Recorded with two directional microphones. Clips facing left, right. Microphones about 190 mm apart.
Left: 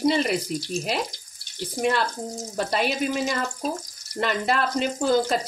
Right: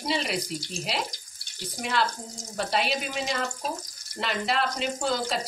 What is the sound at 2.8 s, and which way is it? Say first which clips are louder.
Speech: left 5 dB; 50° left (ahead or behind).